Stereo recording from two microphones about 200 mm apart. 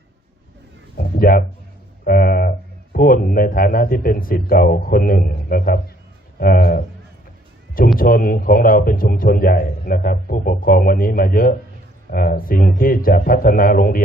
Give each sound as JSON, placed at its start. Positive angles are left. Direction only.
{"t": 0.9, "sound": "a man's voice", "side_deg": 45}
{"t": 7.9, "sound": "a man's voice", "side_deg": 45}